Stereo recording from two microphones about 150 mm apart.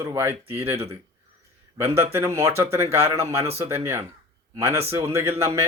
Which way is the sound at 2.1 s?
20° right (ahead or behind).